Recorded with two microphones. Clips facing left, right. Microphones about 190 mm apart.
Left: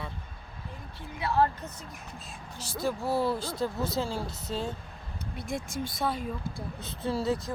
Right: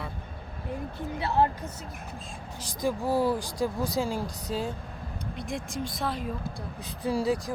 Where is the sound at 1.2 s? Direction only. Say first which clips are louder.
Right 1 dB; 20° right (ahead or behind).